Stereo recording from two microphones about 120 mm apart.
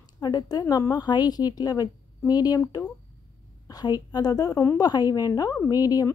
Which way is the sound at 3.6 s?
35° left (ahead or behind).